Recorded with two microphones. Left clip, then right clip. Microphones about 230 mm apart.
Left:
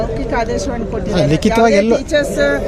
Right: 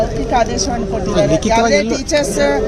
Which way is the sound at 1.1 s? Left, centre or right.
Left.